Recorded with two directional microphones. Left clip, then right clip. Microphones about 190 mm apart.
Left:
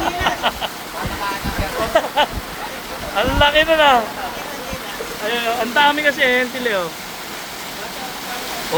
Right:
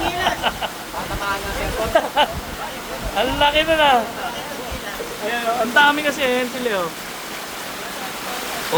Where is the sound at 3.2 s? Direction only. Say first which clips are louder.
Left 3 dB; 10° right (ahead or behind).